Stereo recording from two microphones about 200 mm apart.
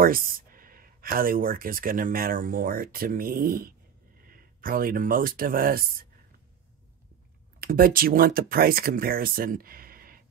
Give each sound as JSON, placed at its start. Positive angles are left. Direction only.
{"t": 0.0, "sound": "speech", "side_deg": -45}
{"t": 7.6, "sound": "speech", "side_deg": -45}